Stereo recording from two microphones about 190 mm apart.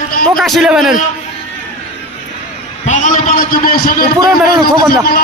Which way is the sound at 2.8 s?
40° left (ahead or behind).